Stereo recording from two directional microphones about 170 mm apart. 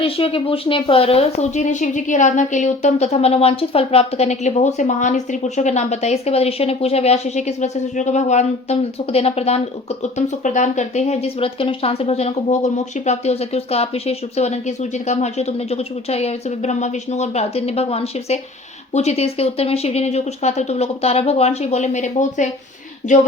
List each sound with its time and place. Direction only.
0.0 s speech: 30° left (ahead or behind)